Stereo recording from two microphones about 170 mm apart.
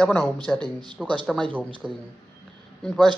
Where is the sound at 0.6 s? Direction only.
25° right (ahead or behind).